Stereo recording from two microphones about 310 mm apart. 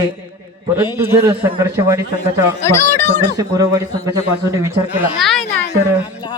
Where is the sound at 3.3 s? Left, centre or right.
Centre.